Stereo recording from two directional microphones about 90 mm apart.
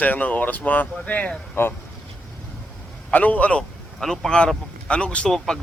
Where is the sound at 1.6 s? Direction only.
25° left (ahead or behind).